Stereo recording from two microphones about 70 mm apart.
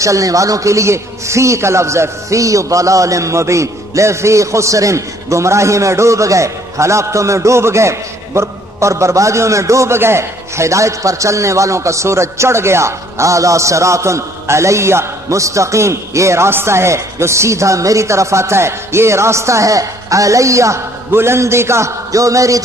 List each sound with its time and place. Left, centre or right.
0.0 s a man's voice: right